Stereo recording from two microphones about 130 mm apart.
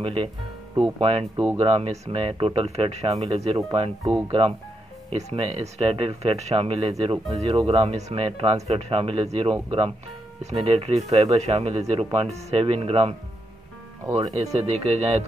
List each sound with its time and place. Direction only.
0.0 s speech: 45° right (ahead or behind)
4.0 s speech: 40° right (ahead or behind)
14.3 s speech: 55° right (ahead or behind)